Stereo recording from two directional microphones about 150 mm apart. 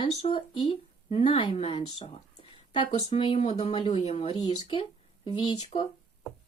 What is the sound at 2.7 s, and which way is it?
Speech, 35° left (ahead or behind).